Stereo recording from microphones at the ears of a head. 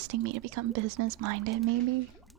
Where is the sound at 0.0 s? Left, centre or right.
Right.